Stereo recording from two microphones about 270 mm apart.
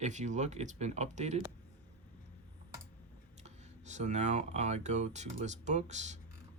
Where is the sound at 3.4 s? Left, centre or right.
Right.